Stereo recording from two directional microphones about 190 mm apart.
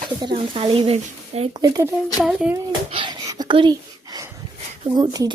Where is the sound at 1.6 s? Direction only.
20° right (ahead or behind).